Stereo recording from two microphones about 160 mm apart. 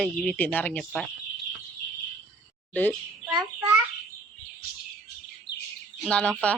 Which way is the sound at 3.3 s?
20° right (ahead or behind).